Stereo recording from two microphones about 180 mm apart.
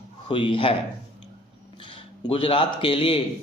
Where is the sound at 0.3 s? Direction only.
30° left (ahead or behind).